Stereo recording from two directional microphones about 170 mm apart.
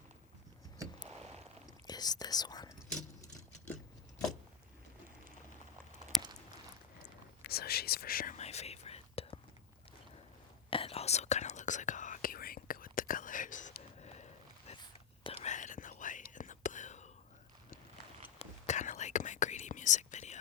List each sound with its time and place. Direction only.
1.9 s speech: 25° left (ahead or behind)
7.4 s whispering: 65° left (ahead or behind)
8.4 s whispering: 40° left (ahead or behind)
10.7 s whispering: 35° left (ahead or behind)
18.3 s whispering: 45° left (ahead or behind)